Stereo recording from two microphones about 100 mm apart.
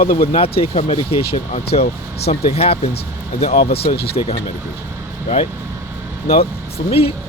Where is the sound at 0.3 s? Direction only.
75° left (ahead or behind).